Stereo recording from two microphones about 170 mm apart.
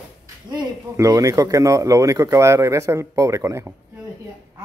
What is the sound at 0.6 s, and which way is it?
Speech, 20° right (ahead or behind).